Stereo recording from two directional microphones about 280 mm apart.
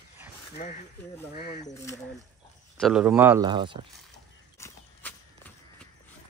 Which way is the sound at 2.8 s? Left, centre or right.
Centre.